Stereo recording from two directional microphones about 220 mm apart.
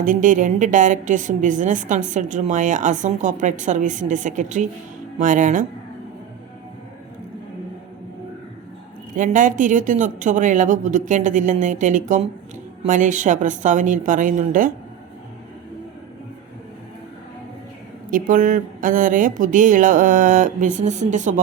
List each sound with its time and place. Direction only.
0.0 s a woman's voice: 35° right (ahead or behind)
9.1 s a woman's voice: 35° right (ahead or behind)
18.1 s a woman's voice: 40° right (ahead or behind)